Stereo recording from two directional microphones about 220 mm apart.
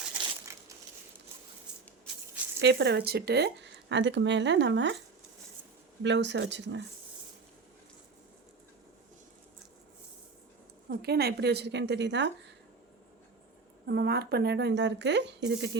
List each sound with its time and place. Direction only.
0.0 s crushing: 5° right (ahead or behind)
2.6 s speech: 50° right (ahead or behind)
6.0 s speech: 55° right (ahead or behind)
10.8 s speech: 45° right (ahead or behind)
13.8 s speech: 50° right (ahead or behind)